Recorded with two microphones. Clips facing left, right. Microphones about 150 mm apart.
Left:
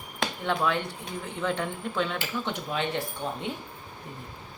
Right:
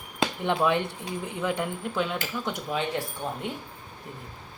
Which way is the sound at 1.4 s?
10° right (ahead or behind).